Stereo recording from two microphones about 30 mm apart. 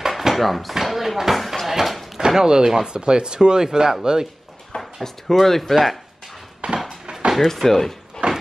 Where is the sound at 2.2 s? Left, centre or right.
Centre.